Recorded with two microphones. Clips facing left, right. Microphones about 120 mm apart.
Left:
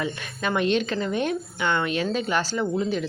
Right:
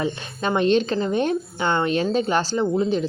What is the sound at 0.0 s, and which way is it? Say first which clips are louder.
Speech: right 3 dB; 30° right (ahead or behind).